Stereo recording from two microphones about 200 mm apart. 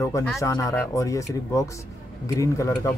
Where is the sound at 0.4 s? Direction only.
15° left (ahead or behind).